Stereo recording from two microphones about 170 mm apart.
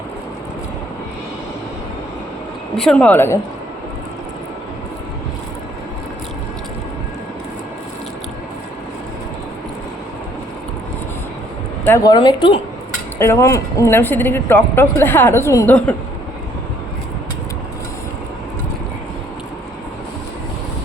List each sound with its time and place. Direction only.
2.7 s speech: 5° left (ahead or behind)
11.9 s a woman's voice: 20° left (ahead or behind)
13.1 s speech: 15° left (ahead or behind)